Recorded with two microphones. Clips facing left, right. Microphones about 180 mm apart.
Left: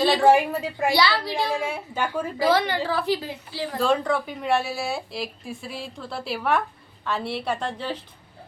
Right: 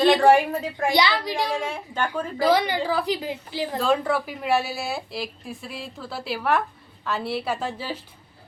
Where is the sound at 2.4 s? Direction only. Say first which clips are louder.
Right 1 dB; 15° right (ahead or behind).